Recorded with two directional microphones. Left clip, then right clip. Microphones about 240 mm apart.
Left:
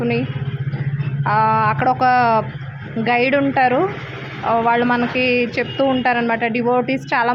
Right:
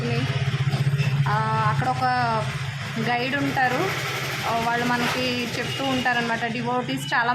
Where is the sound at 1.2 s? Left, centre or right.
Left.